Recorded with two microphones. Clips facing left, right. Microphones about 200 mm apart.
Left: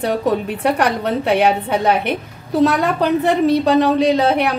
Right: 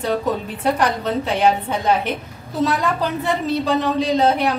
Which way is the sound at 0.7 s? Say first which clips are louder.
Left 2 dB; 65° left (ahead or behind).